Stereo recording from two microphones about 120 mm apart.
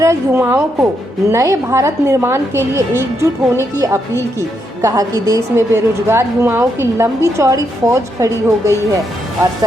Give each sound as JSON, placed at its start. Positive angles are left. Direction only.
{"t": 0.0, "sound": "a woman's voice", "side_deg": -25}